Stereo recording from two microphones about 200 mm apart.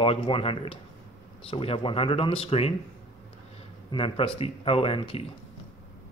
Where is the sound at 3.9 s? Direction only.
25° left (ahead or behind).